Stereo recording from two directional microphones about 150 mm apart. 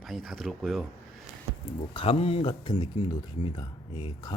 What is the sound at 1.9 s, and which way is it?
Speech, 40° left (ahead or behind).